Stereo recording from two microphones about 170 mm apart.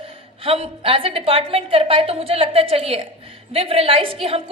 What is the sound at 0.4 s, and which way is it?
A woman's voice, 35° right (ahead or behind).